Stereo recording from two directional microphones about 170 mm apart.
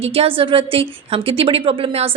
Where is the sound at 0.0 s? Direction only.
35° right (ahead or behind).